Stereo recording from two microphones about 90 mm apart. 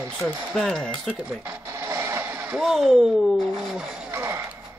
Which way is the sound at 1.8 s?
30° right (ahead or behind).